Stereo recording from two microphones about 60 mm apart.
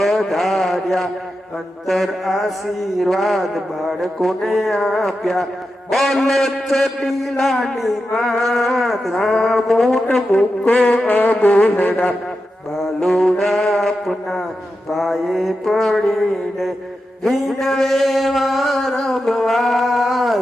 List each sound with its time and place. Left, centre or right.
0.0 s a sound: centre
1.9 s a man's voice: centre
10.3 s brass instrument: left
12.7 s a man's voice: centre